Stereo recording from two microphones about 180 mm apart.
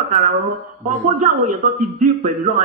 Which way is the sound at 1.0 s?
45° right (ahead or behind).